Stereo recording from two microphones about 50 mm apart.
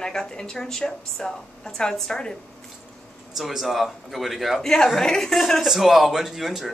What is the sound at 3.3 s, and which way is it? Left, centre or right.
A man's voice, centre.